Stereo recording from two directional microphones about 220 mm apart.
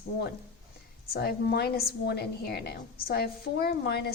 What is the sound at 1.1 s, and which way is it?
A woman's voice, 45° left (ahead or behind).